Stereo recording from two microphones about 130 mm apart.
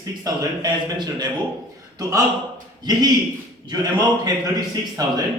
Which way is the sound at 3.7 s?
30° right (ahead or behind).